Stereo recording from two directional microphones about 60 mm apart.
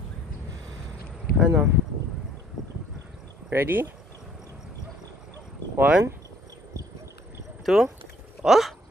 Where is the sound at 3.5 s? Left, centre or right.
Right.